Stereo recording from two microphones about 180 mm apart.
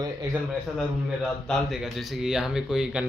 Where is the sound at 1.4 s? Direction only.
Centre (ahead or behind).